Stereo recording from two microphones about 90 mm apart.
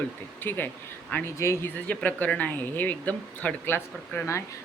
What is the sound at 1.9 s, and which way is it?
Speech, 15° left (ahead or behind).